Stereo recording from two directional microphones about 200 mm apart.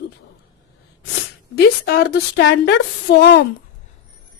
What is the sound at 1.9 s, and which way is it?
A woman's voice, 50° left (ahead or behind).